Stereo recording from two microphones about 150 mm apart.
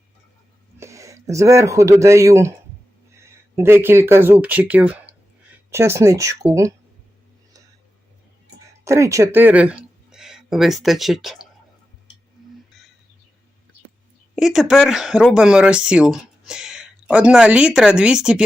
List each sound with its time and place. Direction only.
0.8 s speech: 20° right (ahead or behind)
8.8 s speech: 20° right (ahead or behind); by 11.4 s centre (ahead or behind)
14.3 s speech: 5° right (ahead or behind)